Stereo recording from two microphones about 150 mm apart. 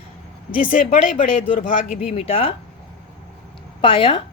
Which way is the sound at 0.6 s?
65° left (ahead or behind).